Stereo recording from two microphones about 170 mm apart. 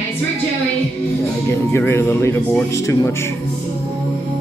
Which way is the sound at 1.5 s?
15° left (ahead or behind).